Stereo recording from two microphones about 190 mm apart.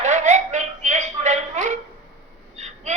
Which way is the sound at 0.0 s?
40° right (ahead or behind).